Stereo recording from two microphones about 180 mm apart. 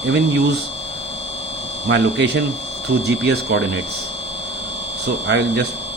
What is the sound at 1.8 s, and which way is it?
Speech, 80° right.